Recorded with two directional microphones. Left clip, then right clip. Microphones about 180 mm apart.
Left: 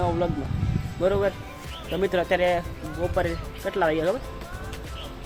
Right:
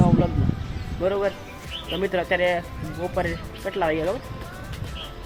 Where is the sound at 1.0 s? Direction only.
15° left (ahead or behind).